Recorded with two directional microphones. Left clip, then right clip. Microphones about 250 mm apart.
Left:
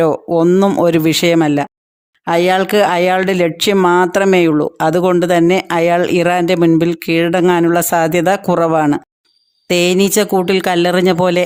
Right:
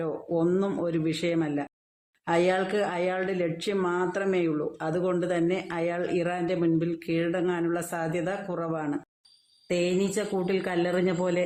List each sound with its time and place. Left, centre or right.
0.0 s speech: left